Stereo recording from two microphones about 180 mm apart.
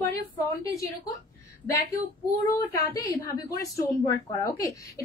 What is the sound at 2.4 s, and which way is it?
A woman's voice, 15° left (ahead or behind).